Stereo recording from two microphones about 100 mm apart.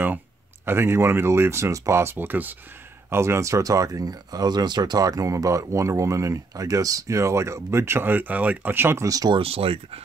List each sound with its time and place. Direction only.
0.7 s speech: 25° right (ahead or behind)
9.3 s speech: 70° right (ahead or behind)